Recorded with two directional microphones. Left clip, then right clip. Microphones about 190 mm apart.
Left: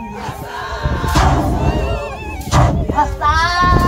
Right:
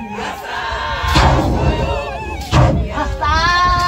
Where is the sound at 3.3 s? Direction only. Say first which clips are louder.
Right 3 dB; 35° left (ahead or behind).